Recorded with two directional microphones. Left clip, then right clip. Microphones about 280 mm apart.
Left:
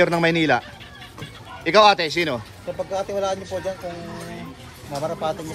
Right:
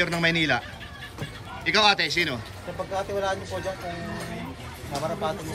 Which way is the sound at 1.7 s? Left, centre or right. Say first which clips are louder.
Left 6 dB; centre.